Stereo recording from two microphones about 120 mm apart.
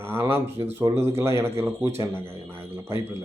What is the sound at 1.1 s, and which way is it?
Speech, 20° right (ahead or behind).